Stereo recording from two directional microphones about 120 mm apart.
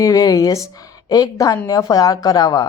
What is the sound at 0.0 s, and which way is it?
A woman's voice, 30° left (ahead or behind).